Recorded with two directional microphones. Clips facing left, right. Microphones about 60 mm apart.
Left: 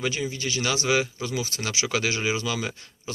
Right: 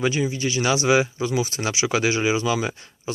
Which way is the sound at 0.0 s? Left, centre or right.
Centre.